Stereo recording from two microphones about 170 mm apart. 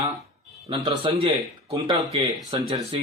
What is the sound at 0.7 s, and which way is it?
Speech, 30° right (ahead or behind).